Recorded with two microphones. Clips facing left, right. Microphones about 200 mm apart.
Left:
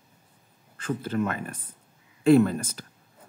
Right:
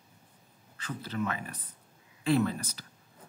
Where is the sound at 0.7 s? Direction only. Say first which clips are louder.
Left 7 dB; 50° left (ahead or behind).